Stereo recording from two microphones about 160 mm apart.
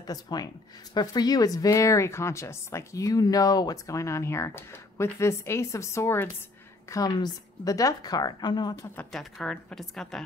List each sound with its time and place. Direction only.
0.0 s speech: 25° left (ahead or behind)
8.9 s a woman's voice: centre (ahead or behind)